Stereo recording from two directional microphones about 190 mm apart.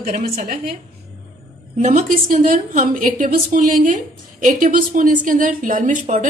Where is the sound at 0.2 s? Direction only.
50° right (ahead or behind).